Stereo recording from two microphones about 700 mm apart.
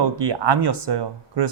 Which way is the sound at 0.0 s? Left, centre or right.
Right.